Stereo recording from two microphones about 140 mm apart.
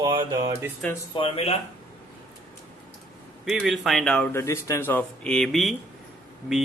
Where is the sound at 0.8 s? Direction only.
5° left (ahead or behind).